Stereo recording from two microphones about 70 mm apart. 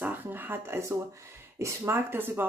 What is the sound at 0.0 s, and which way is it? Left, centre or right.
A woman's voice, right.